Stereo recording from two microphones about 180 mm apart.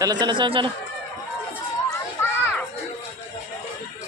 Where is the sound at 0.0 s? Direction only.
25° right (ahead or behind).